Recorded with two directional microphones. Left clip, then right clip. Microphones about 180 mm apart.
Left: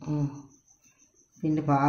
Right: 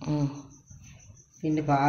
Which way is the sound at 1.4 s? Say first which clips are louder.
Even; 60° left (ahead or behind).